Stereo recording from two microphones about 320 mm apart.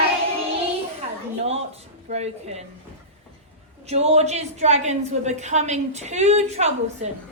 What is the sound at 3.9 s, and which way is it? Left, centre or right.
A woman's voice, centre.